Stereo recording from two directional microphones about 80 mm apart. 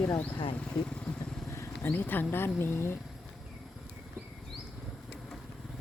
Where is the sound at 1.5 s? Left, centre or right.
Left.